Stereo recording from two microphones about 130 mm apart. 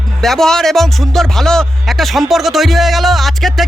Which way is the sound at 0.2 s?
Centre (ahead or behind).